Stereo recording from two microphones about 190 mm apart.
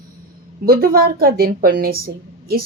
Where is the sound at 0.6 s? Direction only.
50° right (ahead or behind).